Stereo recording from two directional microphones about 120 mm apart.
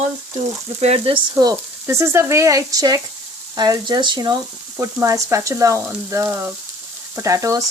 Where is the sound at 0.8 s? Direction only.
55° right (ahead or behind).